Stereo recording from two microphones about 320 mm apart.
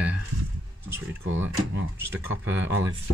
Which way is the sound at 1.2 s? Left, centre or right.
Right.